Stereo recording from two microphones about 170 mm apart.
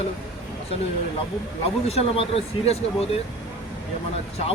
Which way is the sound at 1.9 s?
35° left (ahead or behind).